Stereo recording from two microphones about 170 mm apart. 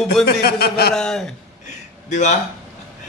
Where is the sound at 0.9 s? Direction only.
5° left (ahead or behind).